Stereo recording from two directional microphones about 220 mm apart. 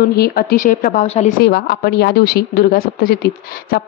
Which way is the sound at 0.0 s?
45° left (ahead or behind).